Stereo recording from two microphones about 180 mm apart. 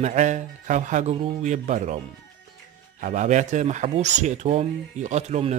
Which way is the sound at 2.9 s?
45° right (ahead or behind).